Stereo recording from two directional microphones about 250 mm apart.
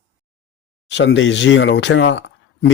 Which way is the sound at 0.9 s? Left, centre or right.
Left.